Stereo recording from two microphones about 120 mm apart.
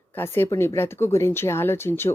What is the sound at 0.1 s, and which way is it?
Speech, 20° left (ahead or behind).